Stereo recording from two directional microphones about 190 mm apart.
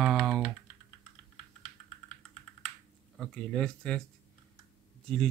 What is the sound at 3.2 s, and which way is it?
Speech, 5° left (ahead or behind).